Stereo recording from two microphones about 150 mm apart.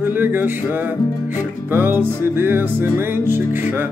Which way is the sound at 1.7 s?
15° right (ahead or behind).